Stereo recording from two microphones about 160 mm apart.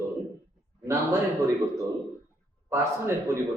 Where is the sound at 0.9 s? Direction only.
20° right (ahead or behind).